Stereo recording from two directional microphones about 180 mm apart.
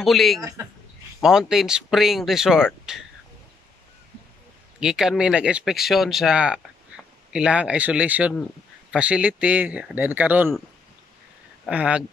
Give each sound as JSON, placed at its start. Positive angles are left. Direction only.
{"t": 0.0, "sound": "speech", "side_deg": 0}
{"t": 0.4, "sound": "speech", "side_deg": -20}
{"t": 1.2, "sound": "speech", "side_deg": 0}
{"t": 4.7, "sound": "speech", "side_deg": -5}
{"t": 11.6, "sound": "speech", "side_deg": -5}